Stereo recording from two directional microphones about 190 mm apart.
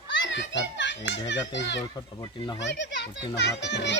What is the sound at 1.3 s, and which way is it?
Speech, 70° left (ahead or behind).